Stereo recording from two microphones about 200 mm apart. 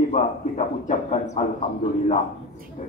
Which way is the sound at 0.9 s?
35° left (ahead or behind).